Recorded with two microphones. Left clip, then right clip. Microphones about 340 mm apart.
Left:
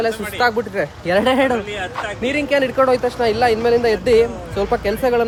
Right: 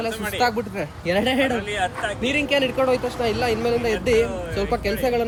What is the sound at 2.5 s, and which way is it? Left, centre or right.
Speech, left.